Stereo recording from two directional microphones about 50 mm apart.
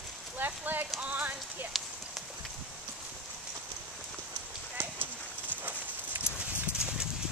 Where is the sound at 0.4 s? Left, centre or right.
Right.